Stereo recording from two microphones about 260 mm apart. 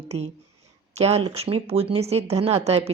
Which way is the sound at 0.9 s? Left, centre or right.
Right.